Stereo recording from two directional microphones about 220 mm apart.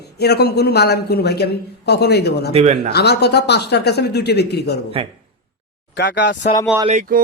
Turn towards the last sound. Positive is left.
turn(degrees=-40)  # may be behind; listen again after turning